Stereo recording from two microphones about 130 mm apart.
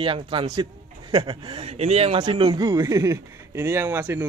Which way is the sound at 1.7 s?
55° right (ahead or behind).